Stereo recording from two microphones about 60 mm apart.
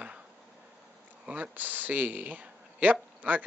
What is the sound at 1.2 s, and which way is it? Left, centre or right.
Speech, right.